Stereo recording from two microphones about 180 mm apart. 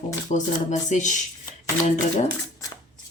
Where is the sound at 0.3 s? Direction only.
45° left (ahead or behind).